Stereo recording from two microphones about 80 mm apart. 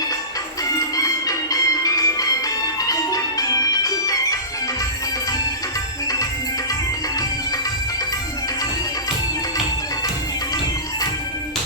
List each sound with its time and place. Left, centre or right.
0.9 s music: left